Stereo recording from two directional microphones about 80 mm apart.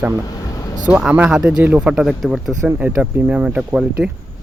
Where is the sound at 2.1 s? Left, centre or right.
Centre.